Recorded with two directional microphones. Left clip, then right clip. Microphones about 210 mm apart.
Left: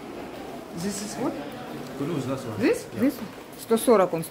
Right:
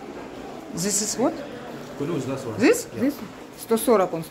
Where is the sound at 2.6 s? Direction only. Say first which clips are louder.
Right 5 dB; 55° right (ahead or behind).